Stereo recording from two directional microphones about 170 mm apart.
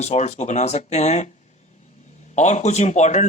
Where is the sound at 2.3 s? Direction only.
45° left (ahead or behind).